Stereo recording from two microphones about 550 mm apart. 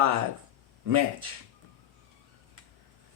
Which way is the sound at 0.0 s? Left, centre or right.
Right.